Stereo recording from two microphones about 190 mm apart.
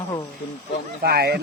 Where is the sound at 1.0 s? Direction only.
55° right (ahead or behind).